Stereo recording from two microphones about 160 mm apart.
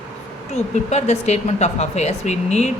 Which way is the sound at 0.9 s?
45° left (ahead or behind).